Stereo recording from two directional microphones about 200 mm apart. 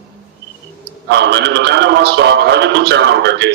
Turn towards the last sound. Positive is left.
turn(degrees=-60)  # may be behind; listen again after turning